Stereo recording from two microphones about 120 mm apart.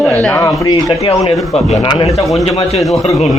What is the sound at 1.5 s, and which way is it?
Speech, 60° left (ahead or behind).